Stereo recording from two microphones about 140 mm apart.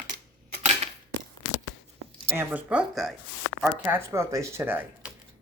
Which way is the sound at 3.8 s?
20° right (ahead or behind).